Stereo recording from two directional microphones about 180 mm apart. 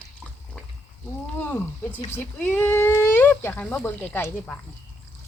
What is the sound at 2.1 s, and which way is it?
Speech, 10° left (ahead or behind).